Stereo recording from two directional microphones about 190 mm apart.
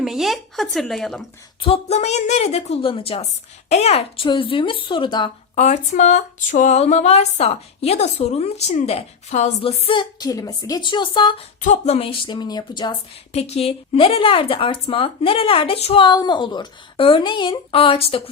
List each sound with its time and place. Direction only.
0.0 s speech: centre (ahead or behind)
1.6 s a woman's voice: 35° left (ahead or behind)
5.5 s a woman's voice: 35° left (ahead or behind)
11.6 s a woman's voice: 35° left (ahead or behind)